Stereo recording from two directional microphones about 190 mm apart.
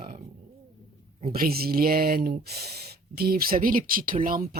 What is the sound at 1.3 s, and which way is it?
Speech, 55° right (ahead or behind).